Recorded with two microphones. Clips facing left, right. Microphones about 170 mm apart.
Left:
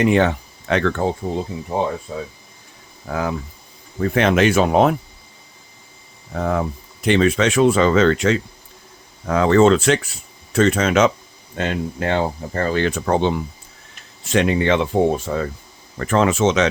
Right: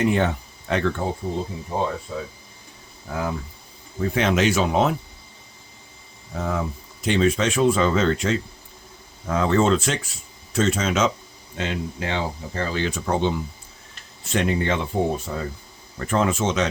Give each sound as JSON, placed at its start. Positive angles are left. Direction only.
{"t": 0.0, "sound": "speech", "side_deg": 80}
{"t": 2.1, "sound": "speech", "side_deg": 30}
{"t": 3.1, "sound": "speech", "side_deg": 75}
{"t": 4.1, "sound": "speech", "side_deg": 60}
{"t": 6.3, "sound": "speech", "side_deg": 60}
{"t": 14.3, "sound": "speech", "side_deg": 90}
{"t": 15.3, "sound": "speech", "side_deg": 80}
{"t": 16.0, "sound": "speech", "side_deg": 90}